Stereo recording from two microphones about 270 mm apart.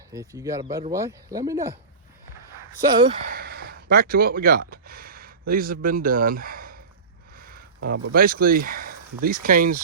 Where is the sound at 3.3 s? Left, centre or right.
Right.